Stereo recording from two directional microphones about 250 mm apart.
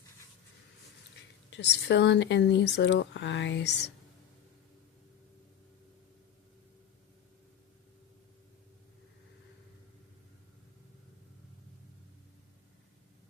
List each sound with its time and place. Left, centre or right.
1.5 s speech: left